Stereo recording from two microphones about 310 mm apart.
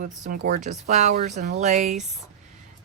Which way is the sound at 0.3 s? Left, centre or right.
Right.